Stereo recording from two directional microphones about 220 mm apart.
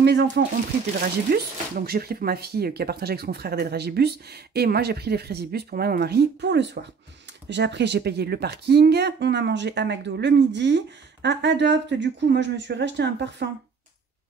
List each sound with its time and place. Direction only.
0.0 s speech: 50° right (ahead or behind)
1.3 s speech: 45° right (ahead or behind)